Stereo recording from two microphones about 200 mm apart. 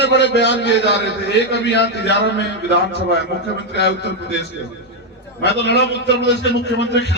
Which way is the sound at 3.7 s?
60° left (ahead or behind).